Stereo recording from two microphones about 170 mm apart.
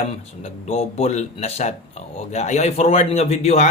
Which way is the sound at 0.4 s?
40° left (ahead or behind).